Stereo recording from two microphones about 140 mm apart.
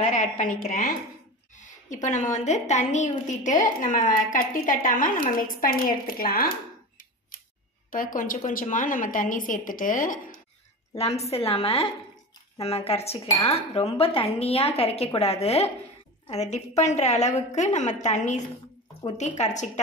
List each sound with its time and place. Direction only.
0.1 s a woman's voice: 65° left (ahead or behind)
5.6 s a woman's voice: 90° left; by 10.4 s 70° left (ahead or behind)
11.0 s a woman's voice: 50° left (ahead or behind)